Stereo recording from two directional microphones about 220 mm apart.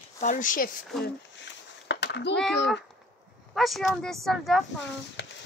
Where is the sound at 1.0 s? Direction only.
55° left (ahead or behind).